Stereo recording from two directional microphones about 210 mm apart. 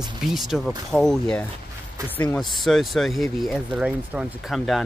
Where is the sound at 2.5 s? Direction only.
Centre (ahead or behind).